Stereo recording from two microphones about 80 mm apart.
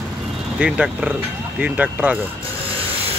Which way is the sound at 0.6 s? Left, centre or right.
Centre.